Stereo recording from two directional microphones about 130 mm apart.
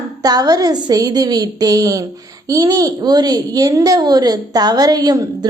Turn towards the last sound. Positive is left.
turn(degrees=-30)  # may be behind; listen again after turning